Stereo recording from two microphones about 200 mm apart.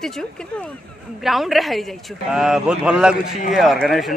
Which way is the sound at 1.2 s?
Centre (ahead or behind).